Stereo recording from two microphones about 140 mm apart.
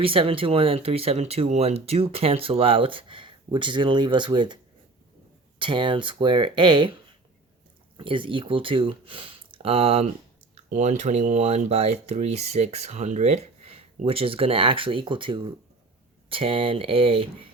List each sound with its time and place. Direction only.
0.0 s speech: 40° right (ahead or behind)
5.5 s speech: 35° right (ahead or behind)
7.9 s speech: 40° right (ahead or behind)
10.5 s speech: 55° right (ahead or behind); by 17.2 s 40° right (ahead or behind)